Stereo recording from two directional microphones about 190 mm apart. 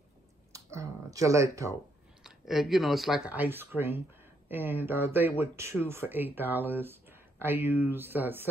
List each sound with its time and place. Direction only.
0.5 s speech: 15° right (ahead or behind)
2.2 s speech: centre (ahead or behind)